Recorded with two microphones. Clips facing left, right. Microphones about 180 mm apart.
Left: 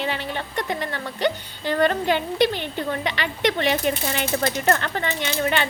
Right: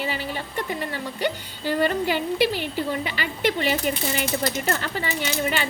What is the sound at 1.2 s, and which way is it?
A woman's voice, 10° right (ahead or behind).